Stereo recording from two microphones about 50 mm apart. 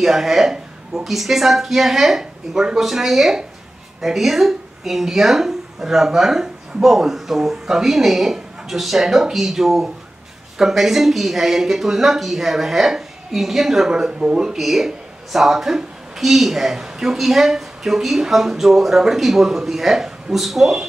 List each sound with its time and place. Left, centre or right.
0.0 s speech: centre
13.8 s speech: centre
14.6 s speech: centre